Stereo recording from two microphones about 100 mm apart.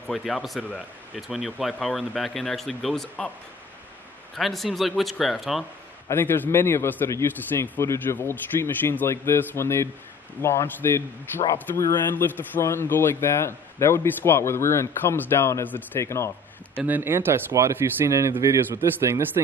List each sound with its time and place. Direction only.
0.1 s speech: centre (ahead or behind)
4.4 s speech: centre (ahead or behind)
6.0 s a man's voice: 20° left (ahead or behind)
16.7 s speech: 15° right (ahead or behind)